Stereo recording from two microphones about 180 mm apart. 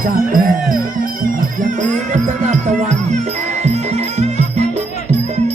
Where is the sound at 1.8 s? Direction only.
40° right (ahead or behind).